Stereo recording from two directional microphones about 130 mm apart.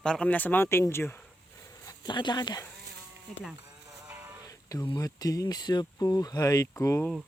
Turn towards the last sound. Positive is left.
turn(degrees=25)  # may be behind; listen again after turning